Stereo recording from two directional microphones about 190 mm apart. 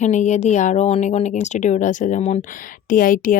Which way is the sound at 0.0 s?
40° left (ahead or behind).